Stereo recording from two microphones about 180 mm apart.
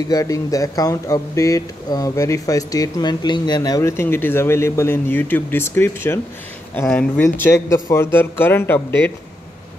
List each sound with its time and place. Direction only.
0.1 s speech: 20° left (ahead or behind)